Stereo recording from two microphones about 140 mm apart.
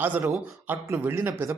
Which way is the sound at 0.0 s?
15° right (ahead or behind).